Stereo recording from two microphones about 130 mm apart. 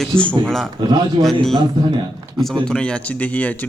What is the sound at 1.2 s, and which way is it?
Speech, 40° right (ahead or behind).